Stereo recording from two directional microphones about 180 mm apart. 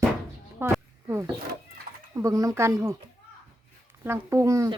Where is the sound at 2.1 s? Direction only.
15° right (ahead or behind).